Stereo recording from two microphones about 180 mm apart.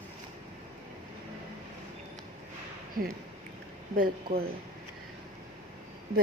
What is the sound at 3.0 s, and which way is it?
A woman's voice, 55° right (ahead or behind).